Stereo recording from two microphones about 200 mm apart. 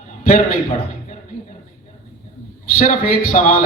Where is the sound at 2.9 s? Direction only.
40° left (ahead or behind).